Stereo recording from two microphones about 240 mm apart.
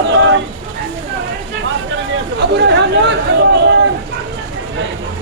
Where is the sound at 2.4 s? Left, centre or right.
Right.